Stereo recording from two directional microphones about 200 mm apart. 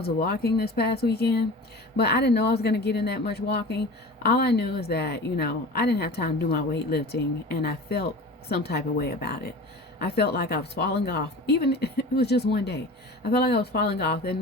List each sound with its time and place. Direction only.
0.0 s a woman's voice: 50° left (ahead or behind)